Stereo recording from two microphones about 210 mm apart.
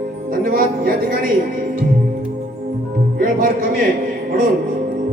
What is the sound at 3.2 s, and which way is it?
Speech, 40° right (ahead or behind).